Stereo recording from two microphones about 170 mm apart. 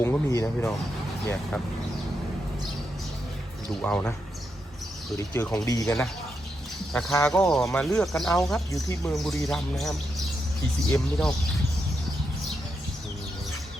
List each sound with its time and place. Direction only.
0.0 s speech: 15° left (ahead or behind)
3.8 s speech: 5° left (ahead or behind)
5.1 s speech: 15° left (ahead or behind); by 8.4 s centre (ahead or behind)
8.7 s speech: 20° left (ahead or behind)
9.1 s speech: centre (ahead or behind)
10.8 s speech: 15° left (ahead or behind)